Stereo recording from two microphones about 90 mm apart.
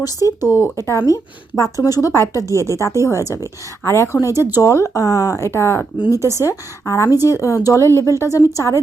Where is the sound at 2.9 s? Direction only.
30° right (ahead or behind).